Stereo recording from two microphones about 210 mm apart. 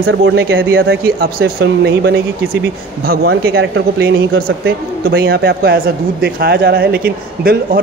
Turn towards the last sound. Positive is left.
turn(degrees=-45)  # may be behind; listen again after turning